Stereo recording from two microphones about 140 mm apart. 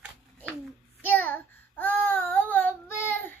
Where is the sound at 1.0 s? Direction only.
15° left (ahead or behind).